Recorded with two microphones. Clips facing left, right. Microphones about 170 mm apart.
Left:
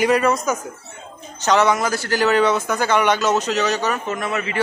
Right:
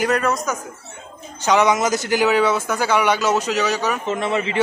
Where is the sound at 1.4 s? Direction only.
15° right (ahead or behind).